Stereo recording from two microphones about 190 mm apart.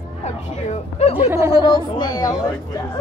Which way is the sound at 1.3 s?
15° right (ahead or behind).